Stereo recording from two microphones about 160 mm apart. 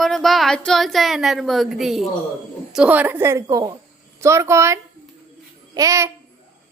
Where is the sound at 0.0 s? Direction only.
Centre (ahead or behind); by 6.1 s 20° right (ahead or behind).